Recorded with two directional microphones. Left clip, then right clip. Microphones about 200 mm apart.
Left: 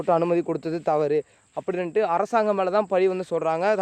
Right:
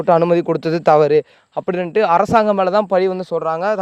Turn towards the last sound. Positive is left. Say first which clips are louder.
# right 4 dB
turn(degrees=-15)  # may be behind; listen again after turning